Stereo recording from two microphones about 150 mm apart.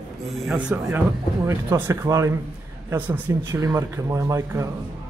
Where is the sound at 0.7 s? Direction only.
10° right (ahead or behind).